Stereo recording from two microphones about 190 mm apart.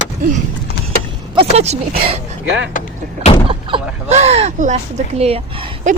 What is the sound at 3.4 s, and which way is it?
Speech, 30° right (ahead or behind).